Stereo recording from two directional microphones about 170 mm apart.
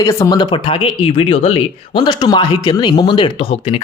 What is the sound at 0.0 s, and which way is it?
Speech, 20° left (ahead or behind).